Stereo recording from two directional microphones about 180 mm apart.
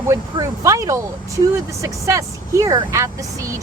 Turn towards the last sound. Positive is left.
turn(degrees=-15)  # may be behind; listen again after turning